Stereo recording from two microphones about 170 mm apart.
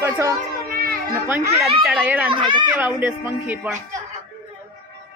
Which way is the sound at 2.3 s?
30° right (ahead or behind).